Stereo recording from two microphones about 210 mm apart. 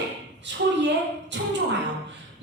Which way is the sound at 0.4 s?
55° right (ahead or behind).